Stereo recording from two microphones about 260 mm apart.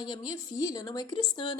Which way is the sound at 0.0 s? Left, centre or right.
Centre.